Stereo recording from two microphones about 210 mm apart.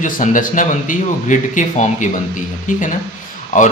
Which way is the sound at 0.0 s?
40° left (ahead or behind).